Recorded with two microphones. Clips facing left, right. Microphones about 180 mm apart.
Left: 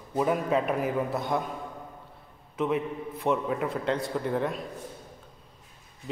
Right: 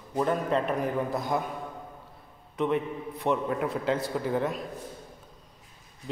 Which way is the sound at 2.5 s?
Centre (ahead or behind).